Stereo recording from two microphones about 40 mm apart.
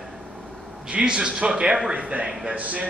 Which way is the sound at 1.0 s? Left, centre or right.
Centre.